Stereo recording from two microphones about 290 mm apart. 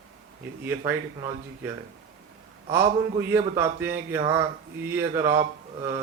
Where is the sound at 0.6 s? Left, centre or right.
Centre.